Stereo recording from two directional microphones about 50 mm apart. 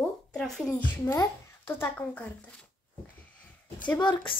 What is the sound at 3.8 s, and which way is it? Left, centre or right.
Speech, left.